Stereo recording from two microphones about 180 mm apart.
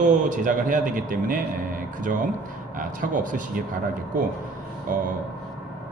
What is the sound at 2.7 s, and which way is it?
Speech, 45° right (ahead or behind).